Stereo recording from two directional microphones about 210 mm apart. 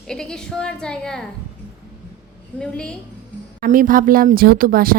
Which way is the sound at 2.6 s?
5° left (ahead or behind).